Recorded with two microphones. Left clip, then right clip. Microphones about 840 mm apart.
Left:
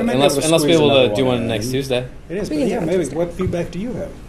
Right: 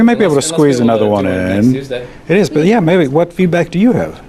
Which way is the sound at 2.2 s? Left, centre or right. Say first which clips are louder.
Right 10 dB; right.